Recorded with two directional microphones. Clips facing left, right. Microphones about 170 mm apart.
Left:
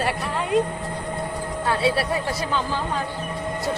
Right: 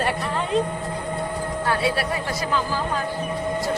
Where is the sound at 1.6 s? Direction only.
25° left (ahead or behind).